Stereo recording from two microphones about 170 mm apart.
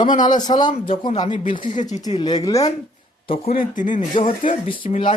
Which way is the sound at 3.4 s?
55° left (ahead or behind).